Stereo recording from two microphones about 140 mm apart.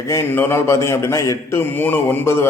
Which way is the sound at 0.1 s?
15° left (ahead or behind).